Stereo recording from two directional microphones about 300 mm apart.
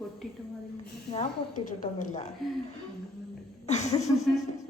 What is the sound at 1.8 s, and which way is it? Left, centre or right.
Speech, left.